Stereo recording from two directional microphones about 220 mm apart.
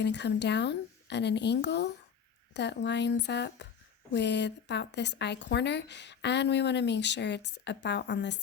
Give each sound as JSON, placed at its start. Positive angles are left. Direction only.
{"t": 0.0, "sound": "a woman's voice", "side_deg": 50}